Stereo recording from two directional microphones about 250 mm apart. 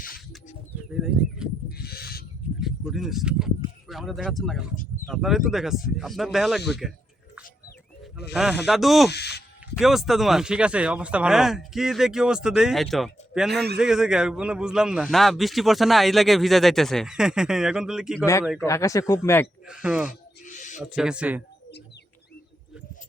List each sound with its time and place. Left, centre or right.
1.8 s owl: left
2.6 s a sound: centre
3.8 s a man's voice: centre
8.3 s a man's voice: centre
9.0 s speech: left
9.7 s a man's voice: centre
18.6 s speech: centre
19.6 s a man's voice: centre
20.4 s owl: left
20.8 s a man's voice: centre